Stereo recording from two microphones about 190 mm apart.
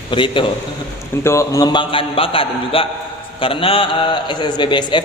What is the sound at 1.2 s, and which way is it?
A man's voice, 15° left (ahead or behind).